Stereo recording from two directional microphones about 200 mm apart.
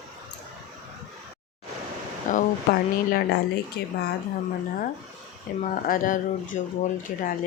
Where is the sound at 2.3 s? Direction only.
45° left (ahead or behind).